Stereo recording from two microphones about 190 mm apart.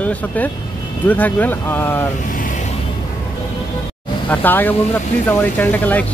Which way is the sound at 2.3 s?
45° left (ahead or behind).